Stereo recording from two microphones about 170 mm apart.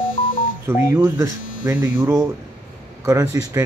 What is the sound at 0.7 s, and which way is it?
Speech, 15° right (ahead or behind).